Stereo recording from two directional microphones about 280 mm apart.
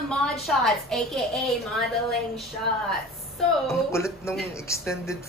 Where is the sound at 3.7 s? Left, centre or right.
Centre.